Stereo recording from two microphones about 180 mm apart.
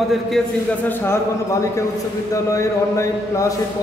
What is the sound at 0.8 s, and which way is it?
A man's voice, 15° left (ahead or behind).